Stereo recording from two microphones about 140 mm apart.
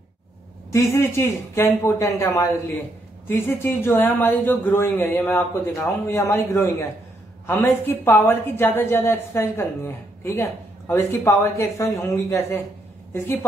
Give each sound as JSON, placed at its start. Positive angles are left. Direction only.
{"t": 0.7, "sound": "a woman's voice", "side_deg": 20}